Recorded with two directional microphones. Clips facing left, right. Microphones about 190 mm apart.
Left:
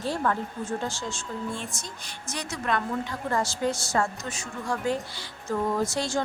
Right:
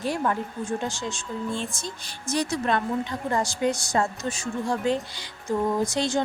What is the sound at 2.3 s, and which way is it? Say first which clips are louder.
A woman's voice: right 5 dB; 30° right (ahead or behind).